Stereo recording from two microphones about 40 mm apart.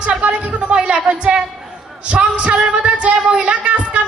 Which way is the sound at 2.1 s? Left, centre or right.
Right.